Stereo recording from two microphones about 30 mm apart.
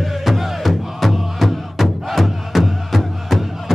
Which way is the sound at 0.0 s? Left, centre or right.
Centre.